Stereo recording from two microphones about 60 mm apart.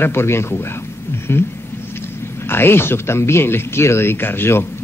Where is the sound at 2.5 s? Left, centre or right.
Left.